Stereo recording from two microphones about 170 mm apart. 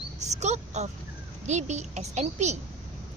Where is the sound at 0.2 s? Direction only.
40° right (ahead or behind).